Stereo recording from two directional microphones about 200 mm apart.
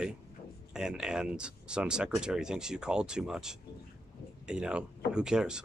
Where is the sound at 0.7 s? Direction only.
5° right (ahead or behind).